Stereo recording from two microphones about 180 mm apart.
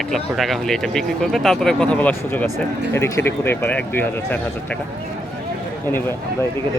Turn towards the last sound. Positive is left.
turn(degrees=15)  # may be behind; listen again after turning